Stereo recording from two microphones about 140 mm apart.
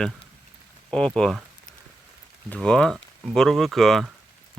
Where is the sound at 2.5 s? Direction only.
5° left (ahead or behind).